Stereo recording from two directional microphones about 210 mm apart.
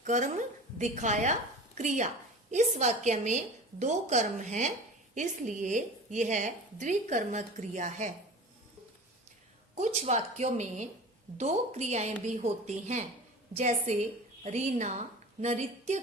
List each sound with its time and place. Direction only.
0.0 s a woman's voice: 35° right (ahead or behind)
9.7 s a woman's voice: 35° right (ahead or behind)